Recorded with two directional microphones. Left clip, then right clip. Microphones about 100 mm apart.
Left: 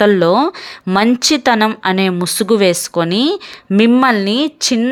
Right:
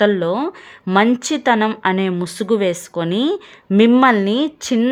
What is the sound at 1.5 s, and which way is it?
Speech, 25° left (ahead or behind).